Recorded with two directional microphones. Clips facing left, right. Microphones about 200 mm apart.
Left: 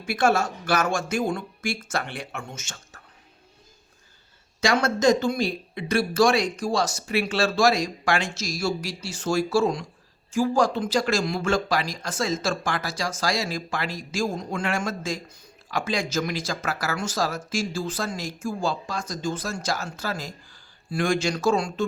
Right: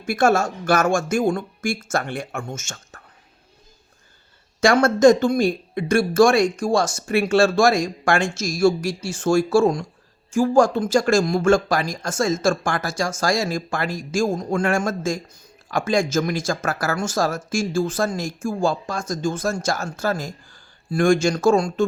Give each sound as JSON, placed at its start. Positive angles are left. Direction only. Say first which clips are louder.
{"t": 0.0, "sound": "speech", "louder": "right 4 dB", "side_deg": -45}
{"t": 4.6, "sound": "speech", "louder": "right 7 dB", "side_deg": -50}